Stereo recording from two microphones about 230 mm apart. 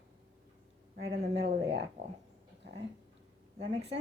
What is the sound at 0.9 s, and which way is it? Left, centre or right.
Speech, right.